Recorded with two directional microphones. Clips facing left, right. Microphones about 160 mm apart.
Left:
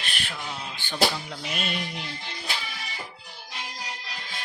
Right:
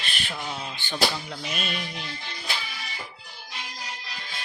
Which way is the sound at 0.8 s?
5° left (ahead or behind).